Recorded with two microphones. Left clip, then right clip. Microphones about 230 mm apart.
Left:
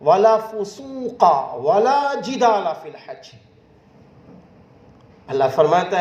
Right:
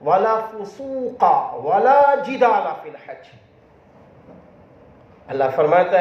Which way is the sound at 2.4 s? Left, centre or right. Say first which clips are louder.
Left 2 dB; left.